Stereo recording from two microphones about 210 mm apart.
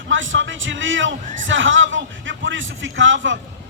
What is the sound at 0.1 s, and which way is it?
A man's voice, 65° right (ahead or behind).